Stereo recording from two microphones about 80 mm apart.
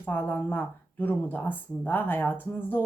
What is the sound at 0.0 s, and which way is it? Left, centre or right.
Speech, left.